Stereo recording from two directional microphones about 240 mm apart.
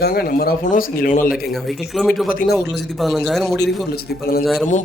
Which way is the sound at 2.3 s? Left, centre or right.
Left.